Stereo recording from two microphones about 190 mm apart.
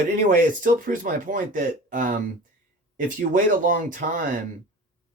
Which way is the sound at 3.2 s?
45° right (ahead or behind).